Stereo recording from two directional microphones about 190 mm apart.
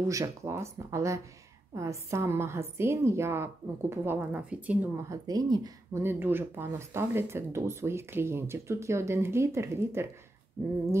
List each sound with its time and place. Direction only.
0.1 s a woman's voice: 15° right (ahead or behind)